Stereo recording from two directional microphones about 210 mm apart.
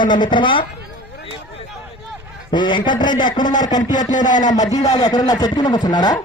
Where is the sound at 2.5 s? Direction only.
20° left (ahead or behind).